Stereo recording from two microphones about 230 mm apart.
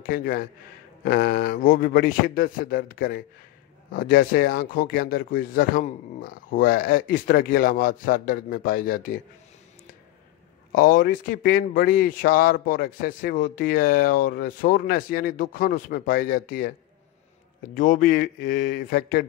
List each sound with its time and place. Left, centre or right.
0.0 s speech: left
10.7 s speech: left
17.7 s speech: left